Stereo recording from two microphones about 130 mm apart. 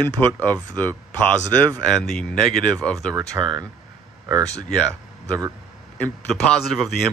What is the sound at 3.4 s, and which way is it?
Speech, 15° right (ahead or behind).